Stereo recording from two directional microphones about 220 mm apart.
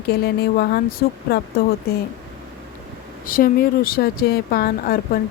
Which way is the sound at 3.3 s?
40° left (ahead or behind).